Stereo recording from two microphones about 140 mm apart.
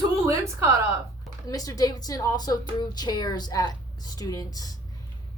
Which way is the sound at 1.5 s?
25° left (ahead or behind).